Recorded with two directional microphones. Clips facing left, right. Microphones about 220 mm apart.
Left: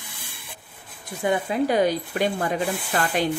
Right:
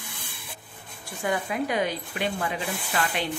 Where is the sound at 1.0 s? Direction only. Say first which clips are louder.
Left 4 dB; 25° left (ahead or behind).